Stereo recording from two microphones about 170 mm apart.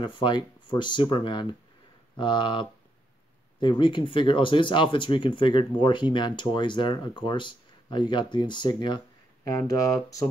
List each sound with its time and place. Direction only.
0.0 s speech: 30° left (ahead or behind)